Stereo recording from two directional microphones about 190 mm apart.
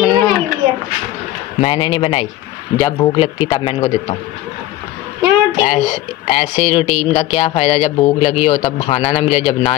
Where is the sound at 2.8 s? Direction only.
20° left (ahead or behind).